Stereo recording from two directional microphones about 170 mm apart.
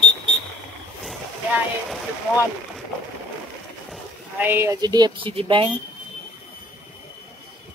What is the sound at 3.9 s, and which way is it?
Speech, 10° right (ahead or behind).